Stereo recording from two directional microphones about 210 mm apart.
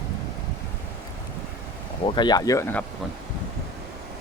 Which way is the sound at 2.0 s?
20° left (ahead or behind).